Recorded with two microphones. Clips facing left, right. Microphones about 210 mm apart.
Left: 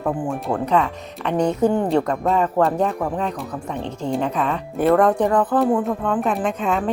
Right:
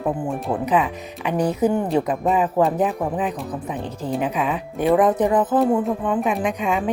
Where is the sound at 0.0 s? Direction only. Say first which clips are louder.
Even; centre (ahead or behind).